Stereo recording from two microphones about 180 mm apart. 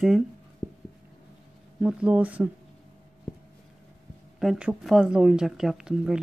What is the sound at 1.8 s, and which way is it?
Speech, 5° right (ahead or behind).